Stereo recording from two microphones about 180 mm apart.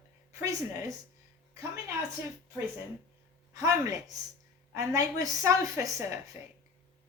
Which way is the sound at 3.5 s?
20° right (ahead or behind).